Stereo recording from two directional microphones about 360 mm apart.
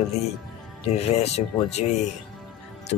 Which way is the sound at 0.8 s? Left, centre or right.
Centre.